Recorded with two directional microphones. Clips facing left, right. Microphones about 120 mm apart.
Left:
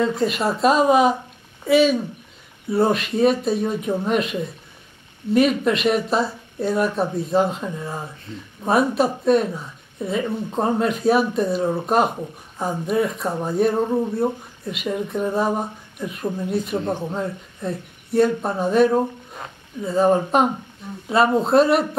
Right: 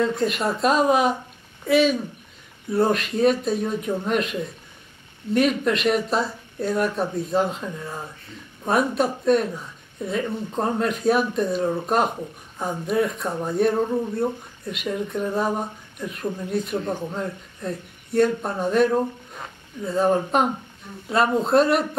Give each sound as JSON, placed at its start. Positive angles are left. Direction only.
{"t": 0.0, "sound": "speech", "side_deg": 0}
{"t": 13.8, "sound": "speech", "side_deg": 20}
{"t": 14.1, "sound": "speech", "side_deg": 0}
{"t": 16.7, "sound": "speech", "side_deg": 20}
{"t": 17.1, "sound": "speech", "side_deg": 5}